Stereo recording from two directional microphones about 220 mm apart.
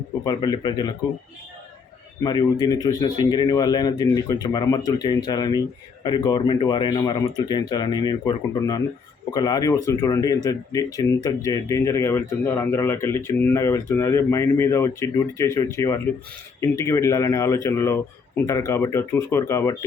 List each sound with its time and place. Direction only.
0.3 s speech: 20° left (ahead or behind)
2.2 s speech: 20° left (ahead or behind)